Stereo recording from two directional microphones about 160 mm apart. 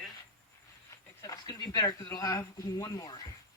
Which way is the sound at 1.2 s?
25° left (ahead or behind).